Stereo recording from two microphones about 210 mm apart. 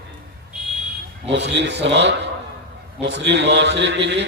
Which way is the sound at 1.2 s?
55° right (ahead or behind).